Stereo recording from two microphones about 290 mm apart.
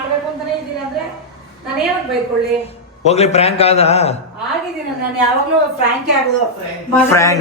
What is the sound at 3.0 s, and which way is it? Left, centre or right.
A man's voice, left.